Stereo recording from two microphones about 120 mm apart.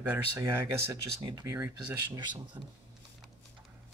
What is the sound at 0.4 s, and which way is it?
Speech, 20° right (ahead or behind).